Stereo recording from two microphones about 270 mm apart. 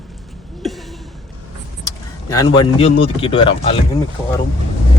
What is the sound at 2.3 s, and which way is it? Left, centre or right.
A man's voice, centre.